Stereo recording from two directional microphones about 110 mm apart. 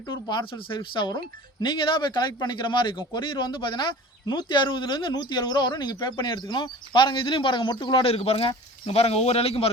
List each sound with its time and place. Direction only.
0.1 s speech: 45° left (ahead or behind)
8.0 s speech: 60° left (ahead or behind)